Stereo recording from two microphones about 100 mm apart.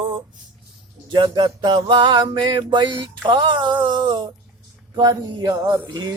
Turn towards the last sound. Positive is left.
turn(degrees=-45)  # may be behind; listen again after turning